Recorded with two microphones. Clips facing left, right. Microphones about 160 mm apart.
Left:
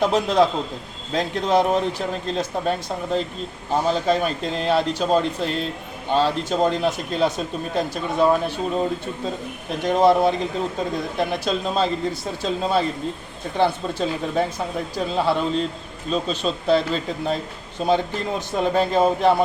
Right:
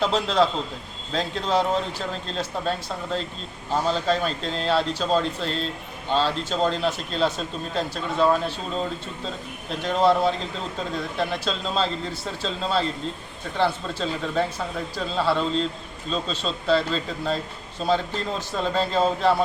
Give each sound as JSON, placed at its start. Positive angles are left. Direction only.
{"t": 0.0, "sound": "speech", "side_deg": 15}